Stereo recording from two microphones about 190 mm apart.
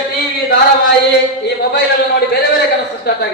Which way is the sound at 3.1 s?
55° left (ahead or behind).